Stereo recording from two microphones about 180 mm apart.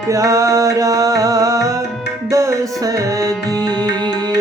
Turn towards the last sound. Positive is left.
turn(degrees=-20)  # may be behind; listen again after turning